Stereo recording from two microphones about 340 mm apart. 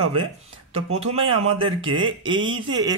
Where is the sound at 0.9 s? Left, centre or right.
Centre.